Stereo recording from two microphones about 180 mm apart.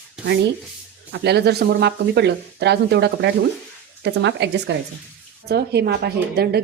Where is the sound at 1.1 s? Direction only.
65° right (ahead or behind).